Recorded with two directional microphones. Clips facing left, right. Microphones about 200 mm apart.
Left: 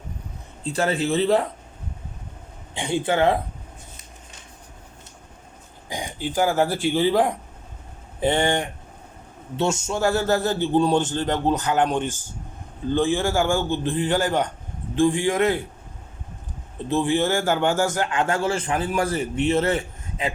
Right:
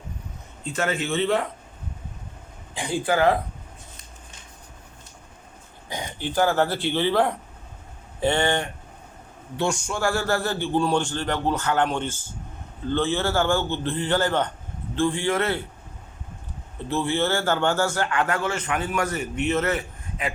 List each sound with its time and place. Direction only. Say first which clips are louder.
0.6 s speech: left 3 dB; 35° left (ahead or behind)
2.7 s a man's voice: left 1 dB; 25° left (ahead or behind)
5.9 s a man's voice: left 1 dB; 15° left (ahead or behind)
16.9 s a man's voice: left 3 dB; 15° left (ahead or behind)